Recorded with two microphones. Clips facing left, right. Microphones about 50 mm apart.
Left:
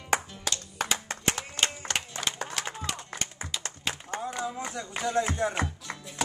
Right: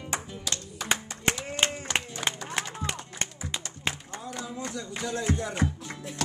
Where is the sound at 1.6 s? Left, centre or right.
Right.